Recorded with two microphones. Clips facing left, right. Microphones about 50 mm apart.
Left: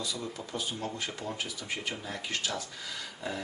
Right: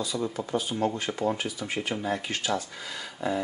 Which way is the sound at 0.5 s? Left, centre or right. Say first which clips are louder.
Right 8 dB; right.